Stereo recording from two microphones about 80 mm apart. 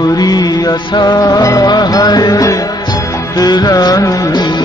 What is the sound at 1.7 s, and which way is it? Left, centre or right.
Mantra, left.